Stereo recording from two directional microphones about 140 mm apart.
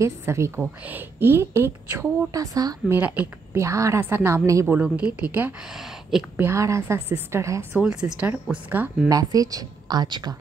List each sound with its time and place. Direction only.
0.0 s a woman's voice: 20° right (ahead or behind)
2.9 s a woman's voice: 15° right (ahead or behind)
5.8 s speech: centre (ahead or behind)
6.3 s a woman's voice: 20° right (ahead or behind)
7.7 s speech: 5° right (ahead or behind)
9.1 s a woman's voice: 25° right (ahead or behind)